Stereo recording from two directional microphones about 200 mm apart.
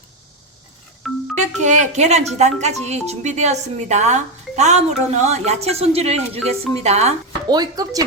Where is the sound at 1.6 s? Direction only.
35° right (ahead or behind).